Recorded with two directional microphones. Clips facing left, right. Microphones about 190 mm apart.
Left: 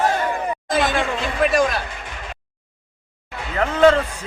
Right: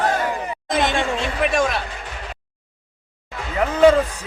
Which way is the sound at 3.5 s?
10° right (ahead or behind).